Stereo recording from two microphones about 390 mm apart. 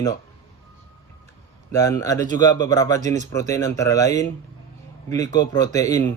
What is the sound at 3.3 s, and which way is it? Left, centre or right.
Speech, centre.